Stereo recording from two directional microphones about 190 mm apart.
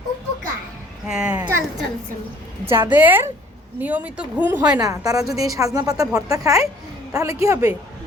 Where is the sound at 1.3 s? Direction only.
20° right (ahead or behind).